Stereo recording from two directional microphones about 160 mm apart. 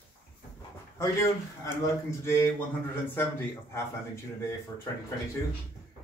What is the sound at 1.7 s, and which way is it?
Speech, 15° left (ahead or behind).